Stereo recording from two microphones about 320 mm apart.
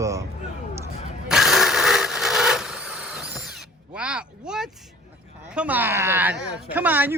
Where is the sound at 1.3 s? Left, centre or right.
Centre.